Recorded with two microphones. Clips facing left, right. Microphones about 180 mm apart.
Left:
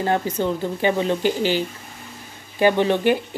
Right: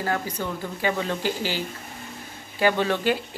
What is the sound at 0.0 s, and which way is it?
Speech, 25° left (ahead or behind).